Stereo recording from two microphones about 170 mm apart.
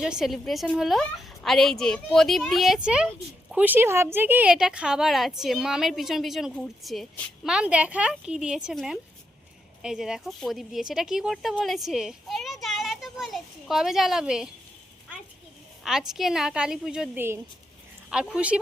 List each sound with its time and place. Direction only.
0.0 s a woman's voice: 5° right (ahead or behind)
15.8 s a woman's voice: centre (ahead or behind)